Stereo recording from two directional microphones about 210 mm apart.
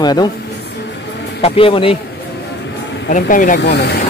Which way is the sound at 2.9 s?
40° left (ahead or behind).